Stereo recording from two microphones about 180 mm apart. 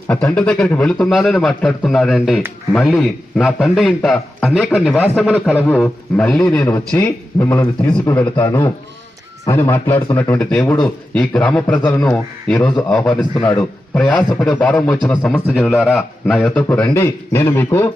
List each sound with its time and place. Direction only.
0.1 s a man's voice: 5° left (ahead or behind)
6.6 s a man's voice: 15° left (ahead or behind)
14.3 s a man's voice: 20° left (ahead or behind)
14.5 s a man's voice: 5° left (ahead or behind)